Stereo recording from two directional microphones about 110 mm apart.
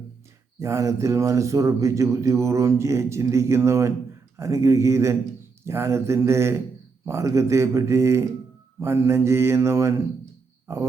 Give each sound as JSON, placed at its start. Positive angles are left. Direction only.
{"t": 0.6, "sound": "a man's voice", "side_deg": -25}